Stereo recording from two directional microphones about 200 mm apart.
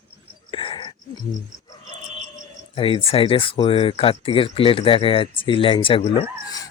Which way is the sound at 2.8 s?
30° left (ahead or behind).